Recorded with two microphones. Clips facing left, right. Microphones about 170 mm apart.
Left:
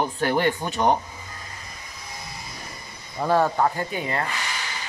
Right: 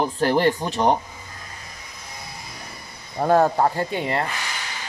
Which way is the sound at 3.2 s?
45° right (ahead or behind).